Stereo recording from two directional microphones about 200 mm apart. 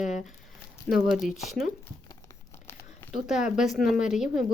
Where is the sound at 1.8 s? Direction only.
15° left (ahead or behind).